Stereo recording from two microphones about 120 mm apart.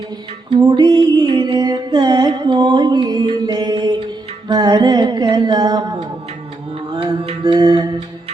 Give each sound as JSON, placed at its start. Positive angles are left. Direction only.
{"t": 0.7, "sound": "mantra", "side_deg": -40}
{"t": 4.5, "sound": "a sound", "side_deg": -35}
{"t": 7.0, "sound": "music", "side_deg": -45}